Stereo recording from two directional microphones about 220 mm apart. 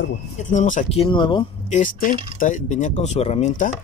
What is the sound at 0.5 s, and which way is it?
Speech, 35° left (ahead or behind).